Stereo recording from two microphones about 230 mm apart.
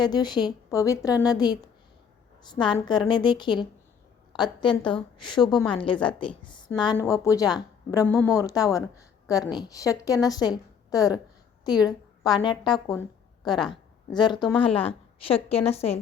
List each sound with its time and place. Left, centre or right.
0.0 s a woman's voice: centre
11.8 s a sound: centre
12.4 s a woman's voice: centre
14.1 s a woman's voice: centre